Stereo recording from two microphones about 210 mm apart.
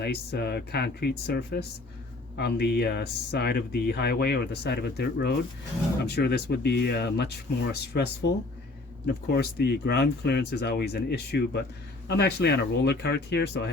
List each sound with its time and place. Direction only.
0.0 s speech: 50° left (ahead or behind)